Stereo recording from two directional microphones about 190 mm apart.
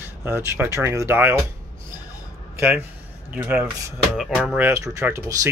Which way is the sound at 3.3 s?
10° right (ahead or behind).